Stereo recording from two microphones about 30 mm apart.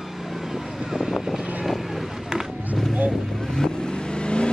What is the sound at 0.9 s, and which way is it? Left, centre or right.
Vehicle, centre.